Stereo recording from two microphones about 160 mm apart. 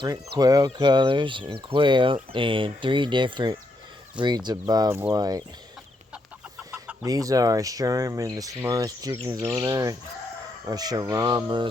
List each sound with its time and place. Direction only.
0.0 s speech: 25° right (ahead or behind)
7.0 s speech: 20° right (ahead or behind)